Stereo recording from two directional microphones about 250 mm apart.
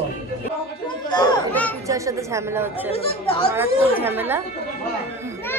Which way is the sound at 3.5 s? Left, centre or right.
Centre.